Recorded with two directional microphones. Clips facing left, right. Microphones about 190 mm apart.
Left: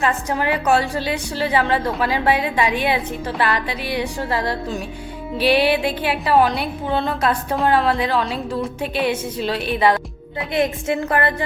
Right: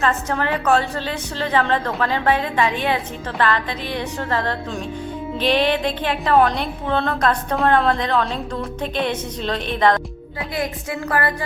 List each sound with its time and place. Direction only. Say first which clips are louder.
0.0 s a woman's voice: even; 15° left (ahead or behind)
10.5 s a woman's voice: left 6 dB; 25° left (ahead or behind)